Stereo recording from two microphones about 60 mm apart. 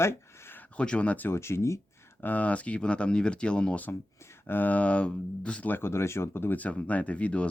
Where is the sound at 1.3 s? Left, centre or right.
Left.